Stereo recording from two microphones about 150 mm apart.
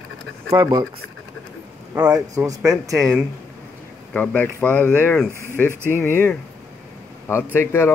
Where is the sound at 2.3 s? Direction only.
20° right (ahead or behind).